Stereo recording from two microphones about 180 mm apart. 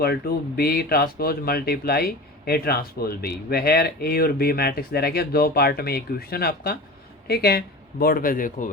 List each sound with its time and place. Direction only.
0.0 s speech: 60° left (ahead or behind)